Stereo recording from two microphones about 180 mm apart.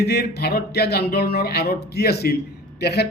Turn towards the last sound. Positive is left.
turn(degrees=65)  # may be behind; listen again after turning